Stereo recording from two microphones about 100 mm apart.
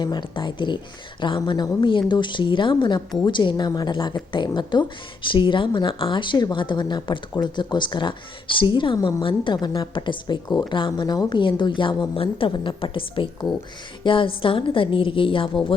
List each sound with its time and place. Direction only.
0.0 s a woman's voice: 50° left (ahead or behind)